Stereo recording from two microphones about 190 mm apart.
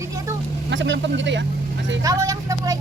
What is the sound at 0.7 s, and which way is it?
Speech, 75° right (ahead or behind).